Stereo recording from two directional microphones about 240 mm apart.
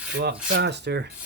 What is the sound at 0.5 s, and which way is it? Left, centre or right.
Rub, right.